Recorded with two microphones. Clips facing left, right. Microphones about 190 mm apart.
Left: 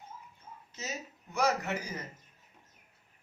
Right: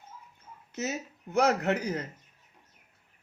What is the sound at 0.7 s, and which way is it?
Speech, 60° right (ahead or behind).